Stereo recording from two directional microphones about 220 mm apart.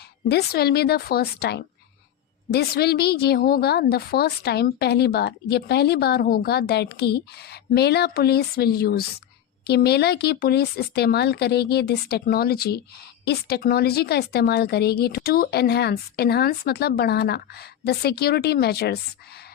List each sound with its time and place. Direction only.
0.3 s a woman's voice: 45° left (ahead or behind)